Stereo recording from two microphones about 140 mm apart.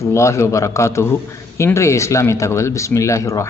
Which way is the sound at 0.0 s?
20° left (ahead or behind).